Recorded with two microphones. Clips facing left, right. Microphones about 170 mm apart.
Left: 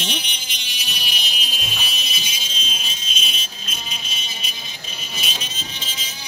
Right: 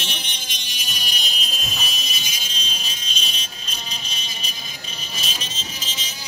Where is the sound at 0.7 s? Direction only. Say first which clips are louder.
Left 1 dB; 45° right (ahead or behind).